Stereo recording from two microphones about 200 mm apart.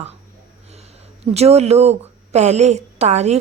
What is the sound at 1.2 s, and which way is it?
A woman's voice, 30° right (ahead or behind).